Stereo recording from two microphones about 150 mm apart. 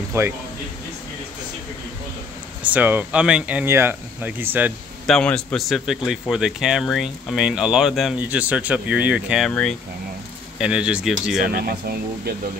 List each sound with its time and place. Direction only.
0.1 s speech: 20° right (ahead or behind)
2.6 s speech: 10° right (ahead or behind)
5.0 s speech: 5° left (ahead or behind)
9.5 s speech: 5° left (ahead or behind)
10.6 s speech: 5° right (ahead or behind)
11.5 s speech: 90° right